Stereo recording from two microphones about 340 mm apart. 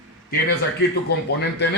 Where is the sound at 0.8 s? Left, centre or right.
Left.